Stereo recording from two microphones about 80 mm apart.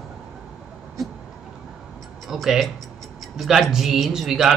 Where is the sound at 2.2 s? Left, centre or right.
Centre.